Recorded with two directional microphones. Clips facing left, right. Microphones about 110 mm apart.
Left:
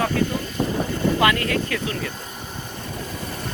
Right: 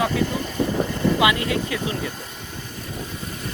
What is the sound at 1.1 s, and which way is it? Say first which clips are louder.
Speech: left 1 dB; 15° right (ahead or behind).